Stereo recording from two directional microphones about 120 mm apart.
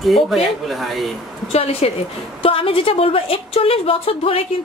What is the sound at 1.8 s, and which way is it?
A woman's voice, 55° left (ahead or behind).